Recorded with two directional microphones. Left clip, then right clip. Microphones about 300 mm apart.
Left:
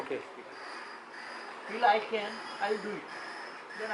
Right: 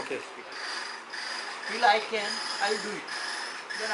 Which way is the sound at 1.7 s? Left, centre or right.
Centre.